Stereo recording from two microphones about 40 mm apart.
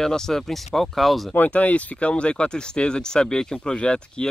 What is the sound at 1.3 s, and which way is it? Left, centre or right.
Speech, left.